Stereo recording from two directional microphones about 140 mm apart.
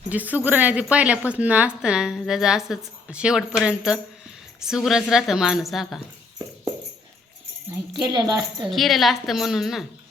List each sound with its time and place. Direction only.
0.1 s a woman's voice: 10° right (ahead or behind)
8.0 s a woman's voice: 30° right (ahead or behind)
8.7 s a woman's voice: centre (ahead or behind)